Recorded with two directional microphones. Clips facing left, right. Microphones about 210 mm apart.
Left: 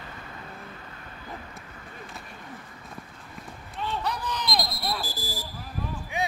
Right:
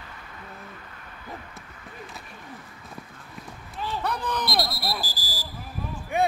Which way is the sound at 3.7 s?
Centre (ahead or behind).